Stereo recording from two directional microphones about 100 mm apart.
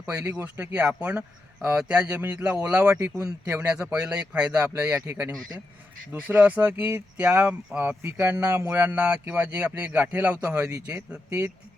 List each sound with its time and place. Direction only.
0.4 s speech: 15° right (ahead or behind)
3.8 s speech: 10° right (ahead or behind)
6.1 s speech: 15° right (ahead or behind)
10.8 s speech: 15° right (ahead or behind)